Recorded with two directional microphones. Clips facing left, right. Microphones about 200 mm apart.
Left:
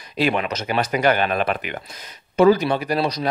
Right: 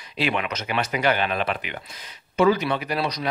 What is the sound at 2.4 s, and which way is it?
Speech, 35° left (ahead or behind).